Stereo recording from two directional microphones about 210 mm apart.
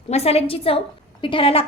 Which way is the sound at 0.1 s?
30° left (ahead or behind).